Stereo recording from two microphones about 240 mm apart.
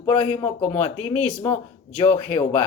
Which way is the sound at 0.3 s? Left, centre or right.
Left.